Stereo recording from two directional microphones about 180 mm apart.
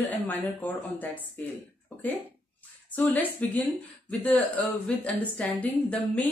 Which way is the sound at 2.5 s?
10° left (ahead or behind).